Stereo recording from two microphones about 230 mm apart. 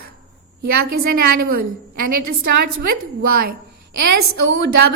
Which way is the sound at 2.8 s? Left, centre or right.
Right.